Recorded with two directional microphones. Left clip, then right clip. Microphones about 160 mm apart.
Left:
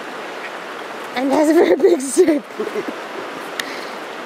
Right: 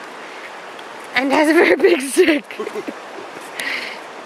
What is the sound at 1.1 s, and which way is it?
Speech, 25° right (ahead or behind).